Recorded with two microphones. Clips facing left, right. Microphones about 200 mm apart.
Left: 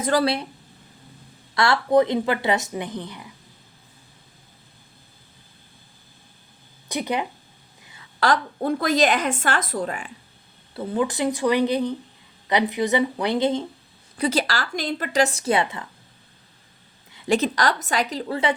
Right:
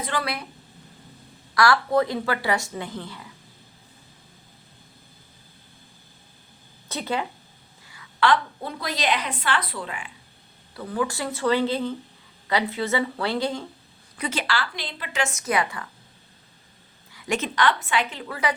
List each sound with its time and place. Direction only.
0.0 s a woman's voice: 35° left (ahead or behind)
1.5 s a woman's voice: 25° left (ahead or behind)
6.8 s speech: 15° left (ahead or behind)
8.2 s a woman's voice: 45° left (ahead or behind)
10.8 s a woman's voice: 25° left (ahead or behind)
14.2 s a woman's voice: 35° left (ahead or behind)
17.1 s a woman's voice: 30° left (ahead or behind)